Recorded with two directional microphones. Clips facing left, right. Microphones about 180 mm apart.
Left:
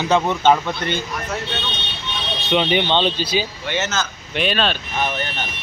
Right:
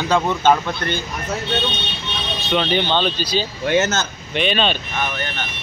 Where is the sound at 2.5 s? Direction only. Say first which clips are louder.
Left 1 dB; 20° left (ahead or behind).